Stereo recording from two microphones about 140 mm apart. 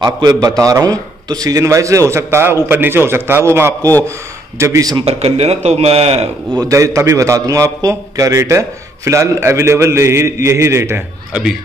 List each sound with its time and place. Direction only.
0.0 s a man's voice: 30° right (ahead or behind)
5.0 s a man's voice: 45° right (ahead or behind)
6.5 s a man's voice: 25° right (ahead or behind)